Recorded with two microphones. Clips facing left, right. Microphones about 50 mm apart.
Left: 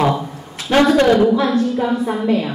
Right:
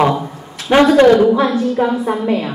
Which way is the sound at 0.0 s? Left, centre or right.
Centre.